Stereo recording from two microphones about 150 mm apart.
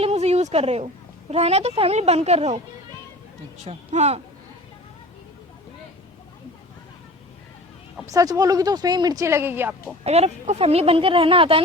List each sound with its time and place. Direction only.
0.0 s speech: 45° right (ahead or behind)
3.6 s speech: 50° right (ahead or behind)
8.1 s speech: 25° right (ahead or behind)
10.0 s speech: 45° right (ahead or behind)